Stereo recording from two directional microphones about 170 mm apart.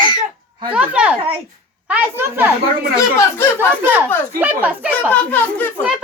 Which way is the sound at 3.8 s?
10° right (ahead or behind).